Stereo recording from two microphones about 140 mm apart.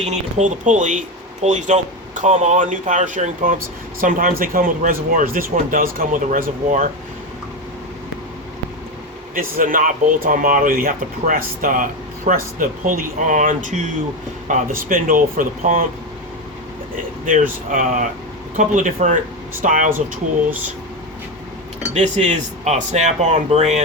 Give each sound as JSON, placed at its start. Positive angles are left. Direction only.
{"t": 0.0, "sound": "speech", "side_deg": -55}
{"t": 4.0, "sound": "speech", "side_deg": -85}
{"t": 9.3, "sound": "speech", "side_deg": -80}
{"t": 17.2, "sound": "speech", "side_deg": -70}
{"t": 21.9, "sound": "speech", "side_deg": -55}